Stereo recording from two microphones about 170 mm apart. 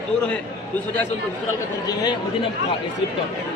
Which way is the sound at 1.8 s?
25° left (ahead or behind).